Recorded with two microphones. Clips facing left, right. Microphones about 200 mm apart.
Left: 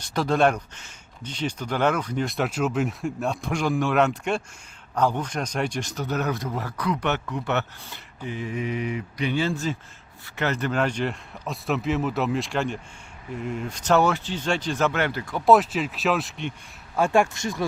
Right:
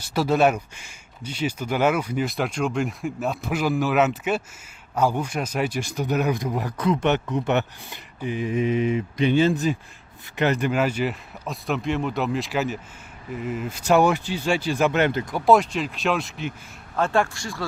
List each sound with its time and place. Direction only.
0.0 s speech: 5° right (ahead or behind)
15.4 s speech: centre (ahead or behind)
17.0 s speech: 15° left (ahead or behind)